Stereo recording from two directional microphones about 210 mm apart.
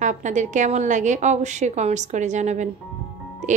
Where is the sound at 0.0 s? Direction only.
35° right (ahead or behind).